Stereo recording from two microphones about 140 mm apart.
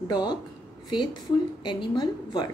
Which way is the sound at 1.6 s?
35° left (ahead or behind).